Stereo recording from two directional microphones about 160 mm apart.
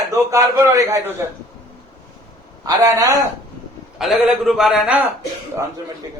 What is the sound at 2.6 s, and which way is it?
Speech, 20° right (ahead or behind).